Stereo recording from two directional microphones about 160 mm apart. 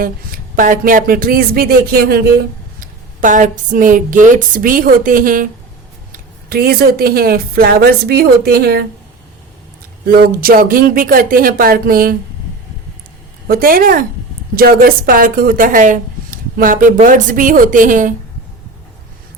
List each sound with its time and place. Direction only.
0.0 s speech: 60° right (ahead or behind)
2.8 s speech: 55° right (ahead or behind); by 8.9 s 75° right (ahead or behind)
10.1 s speech: 65° right (ahead or behind)
13.5 s speech: 65° right (ahead or behind)